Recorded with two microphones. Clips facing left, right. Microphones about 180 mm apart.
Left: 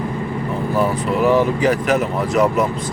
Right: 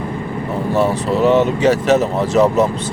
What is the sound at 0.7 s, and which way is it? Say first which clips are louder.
Speech: right 3 dB; 25° right (ahead or behind).